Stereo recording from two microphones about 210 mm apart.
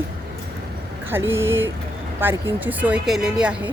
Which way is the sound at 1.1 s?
10° right (ahead or behind).